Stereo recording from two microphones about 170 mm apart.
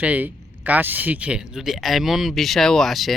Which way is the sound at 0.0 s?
10° right (ahead or behind).